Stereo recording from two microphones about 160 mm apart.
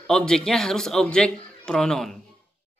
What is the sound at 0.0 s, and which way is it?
A man's voice, 5° left (ahead or behind).